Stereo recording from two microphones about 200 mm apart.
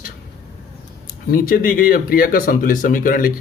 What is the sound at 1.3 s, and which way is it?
Speech, 45° left (ahead or behind).